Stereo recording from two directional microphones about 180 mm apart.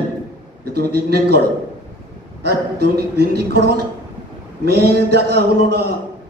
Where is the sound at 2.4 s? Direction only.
65° right (ahead or behind).